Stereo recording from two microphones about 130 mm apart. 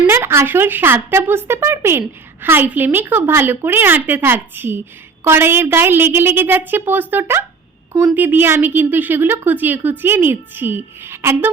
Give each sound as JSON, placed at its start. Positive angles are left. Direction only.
{"t": 0.1, "sound": "a woman's voice", "side_deg": -20}